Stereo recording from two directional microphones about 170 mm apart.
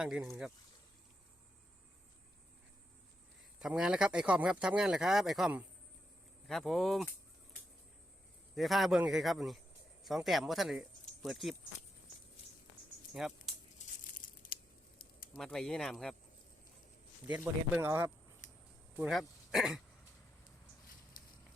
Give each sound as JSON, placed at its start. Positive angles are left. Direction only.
{"t": 0.0, "sound": "speech", "side_deg": -5}
{"t": 3.6, "sound": "speech", "side_deg": -5}
{"t": 8.5, "sound": "speech", "side_deg": 0}
{"t": 13.2, "sound": "speech", "side_deg": 0}
{"t": 13.7, "sound": "crumpling", "side_deg": 50}
{"t": 15.4, "sound": "speech", "side_deg": 5}
{"t": 17.2, "sound": "speech", "side_deg": -10}
{"t": 18.4, "sound": "a sound", "side_deg": 45}
{"t": 18.9, "sound": "speech", "side_deg": -5}